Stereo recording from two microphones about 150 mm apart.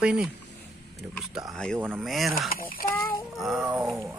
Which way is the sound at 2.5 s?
75° left (ahead or behind).